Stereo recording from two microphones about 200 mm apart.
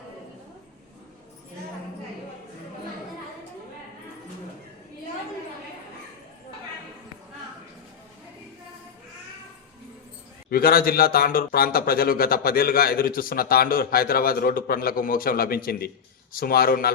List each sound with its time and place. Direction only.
10.5 s speech: 50° left (ahead or behind)